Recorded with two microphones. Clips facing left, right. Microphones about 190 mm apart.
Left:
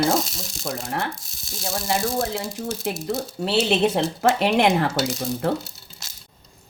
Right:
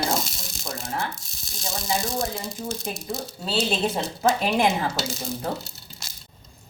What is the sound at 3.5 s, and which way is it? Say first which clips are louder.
A woman's voice: left 5 dB; 70° left (ahead or behind).